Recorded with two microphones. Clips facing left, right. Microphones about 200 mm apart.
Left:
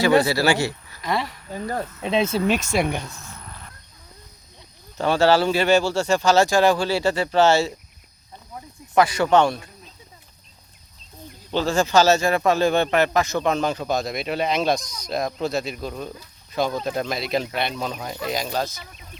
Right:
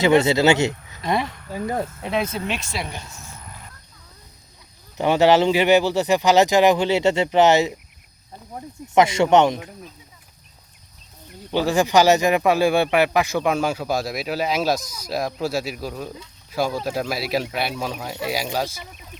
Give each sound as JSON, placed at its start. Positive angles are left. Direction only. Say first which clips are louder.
{"t": 0.0, "sound": "speech", "louder": "right 2 dB", "side_deg": -20}
{"t": 0.9, "sound": "a sound", "louder": "right 2 dB", "side_deg": -20}
{"t": 2.0, "sound": "speech", "louder": "left 3 dB", "side_deg": 25}
{"t": 2.5, "sound": "speech", "louder": "left 7 dB", "side_deg": 45}
{"t": 4.9, "sound": "speech", "louder": "right 2 dB", "side_deg": -15}
{"t": 9.0, "sound": "speech", "louder": "right 2 dB", "side_deg": -25}
{"t": 11.5, "sound": "speech", "louder": "right 1 dB", "side_deg": -15}